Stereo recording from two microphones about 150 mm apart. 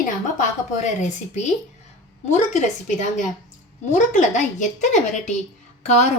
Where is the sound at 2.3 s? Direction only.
50° left (ahead or behind).